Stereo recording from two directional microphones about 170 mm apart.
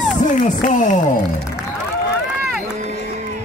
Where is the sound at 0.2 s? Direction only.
45° left (ahead or behind).